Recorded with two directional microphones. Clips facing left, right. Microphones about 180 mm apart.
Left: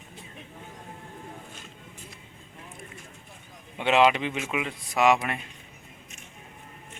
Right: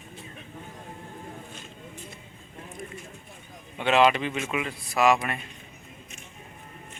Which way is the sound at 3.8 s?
15° left (ahead or behind).